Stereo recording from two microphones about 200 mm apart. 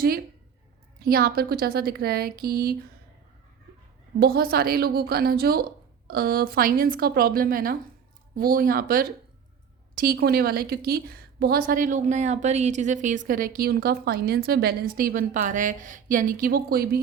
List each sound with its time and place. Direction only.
1.0 s a woman's voice: 50° right (ahead or behind)
4.2 s a woman's voice: 50° right (ahead or behind)